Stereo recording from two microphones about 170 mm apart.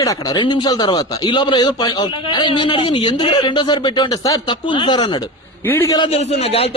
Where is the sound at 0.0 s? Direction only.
20° left (ahead or behind).